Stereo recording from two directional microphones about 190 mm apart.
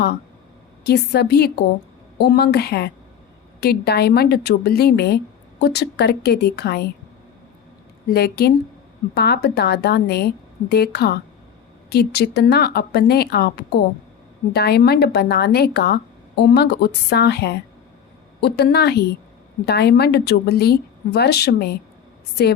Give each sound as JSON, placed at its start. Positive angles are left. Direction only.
{"t": 0.9, "sound": "a woman's voice", "side_deg": 60}
{"t": 8.1, "sound": "a woman's voice", "side_deg": 60}